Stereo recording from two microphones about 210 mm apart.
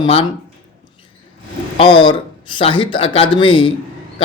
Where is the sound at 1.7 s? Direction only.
25° left (ahead or behind).